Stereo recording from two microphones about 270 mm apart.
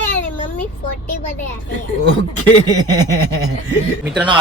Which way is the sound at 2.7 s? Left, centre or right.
Centre.